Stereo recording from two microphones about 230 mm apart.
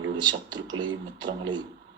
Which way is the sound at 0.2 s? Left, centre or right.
Centre.